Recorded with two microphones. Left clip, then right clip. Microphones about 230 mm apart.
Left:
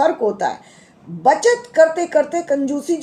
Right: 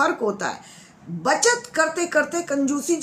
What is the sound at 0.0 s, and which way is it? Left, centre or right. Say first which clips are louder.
Speech: left 5 dB; centre.